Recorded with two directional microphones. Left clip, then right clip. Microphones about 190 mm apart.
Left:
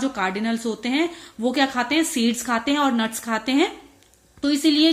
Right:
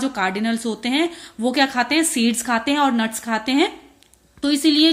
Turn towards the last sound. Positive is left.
turn(degrees=-15)  # may be behind; listen again after turning